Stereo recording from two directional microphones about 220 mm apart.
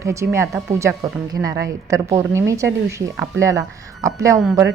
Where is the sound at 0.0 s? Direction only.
15° right (ahead or behind).